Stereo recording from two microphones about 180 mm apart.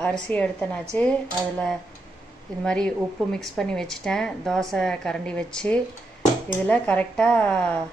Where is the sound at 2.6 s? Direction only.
5° left (ahead or behind).